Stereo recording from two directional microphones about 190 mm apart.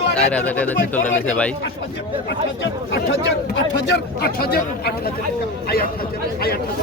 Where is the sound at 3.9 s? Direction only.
60° left (ahead or behind).